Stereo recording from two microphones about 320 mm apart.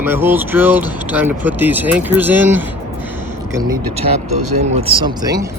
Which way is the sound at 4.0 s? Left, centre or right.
Right.